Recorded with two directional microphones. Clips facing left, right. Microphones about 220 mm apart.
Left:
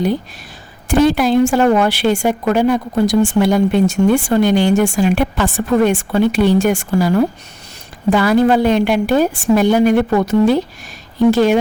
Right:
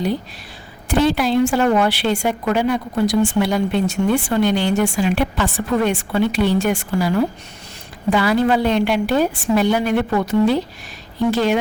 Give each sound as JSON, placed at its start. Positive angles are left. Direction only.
{"t": 0.9, "sound": "a woman's voice", "side_deg": 45}